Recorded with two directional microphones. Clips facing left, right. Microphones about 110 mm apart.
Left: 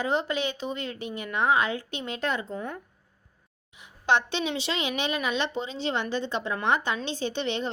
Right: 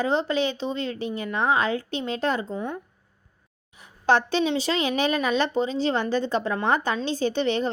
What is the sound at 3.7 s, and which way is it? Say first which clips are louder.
A woman's voice: right 3 dB; 40° right (ahead or behind).